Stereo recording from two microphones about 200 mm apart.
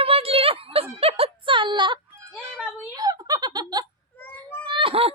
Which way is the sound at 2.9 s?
20° right (ahead or behind).